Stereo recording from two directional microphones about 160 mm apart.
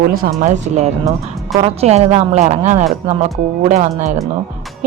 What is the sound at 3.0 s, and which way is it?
Speech, 35° right (ahead or behind).